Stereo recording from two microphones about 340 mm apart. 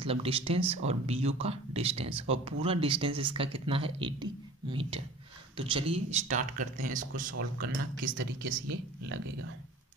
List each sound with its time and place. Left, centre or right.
0.0 s speech: centre